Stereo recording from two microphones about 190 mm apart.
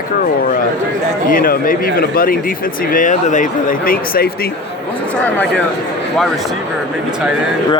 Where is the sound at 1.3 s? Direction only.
50° left (ahead or behind).